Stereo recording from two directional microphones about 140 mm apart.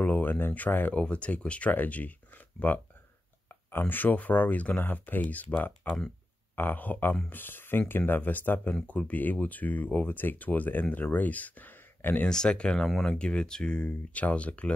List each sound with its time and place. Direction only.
0.0 s speech: 10° left (ahead or behind)
6.5 s speech: 15° left (ahead or behind)